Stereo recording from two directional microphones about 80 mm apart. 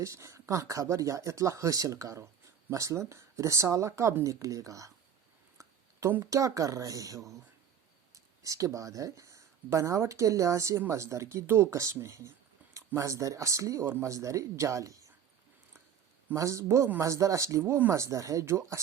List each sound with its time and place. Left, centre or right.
0.0 s speech: right
5.5 s a sound: right
6.3 s speech: right
16.3 s speech: right